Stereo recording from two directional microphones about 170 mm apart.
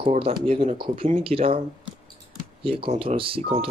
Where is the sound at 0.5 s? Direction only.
30° right (ahead or behind).